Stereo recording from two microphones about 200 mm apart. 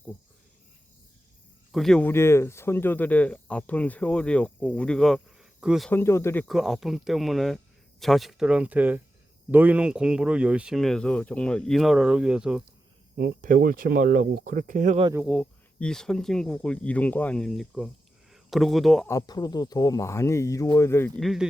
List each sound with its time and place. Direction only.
1.7 s speech: centre (ahead or behind)
5.9 s speech: 10° left (ahead or behind)
6.5 s speech: centre (ahead or behind)
13.1 s speech: 45° right (ahead or behind)
15.1 s speech: centre (ahead or behind)
19.0 s speech: 15° left (ahead or behind)
21.2 s speech: centre (ahead or behind)